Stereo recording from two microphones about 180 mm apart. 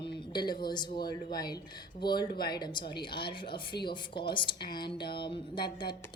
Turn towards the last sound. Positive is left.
turn(degrees=25)  # may be behind; listen again after turning